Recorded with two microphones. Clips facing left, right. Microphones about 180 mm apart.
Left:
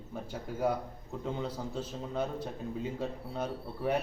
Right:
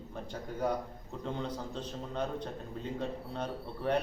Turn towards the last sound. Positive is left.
turn(degrees=10)  # may be behind; listen again after turning